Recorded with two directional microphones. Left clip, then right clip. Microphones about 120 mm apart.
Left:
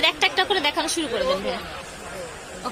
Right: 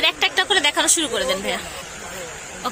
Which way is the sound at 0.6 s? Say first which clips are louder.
Right 4 dB; centre (ahead or behind).